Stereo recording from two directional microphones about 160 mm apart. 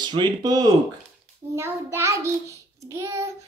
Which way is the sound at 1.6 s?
15° right (ahead or behind).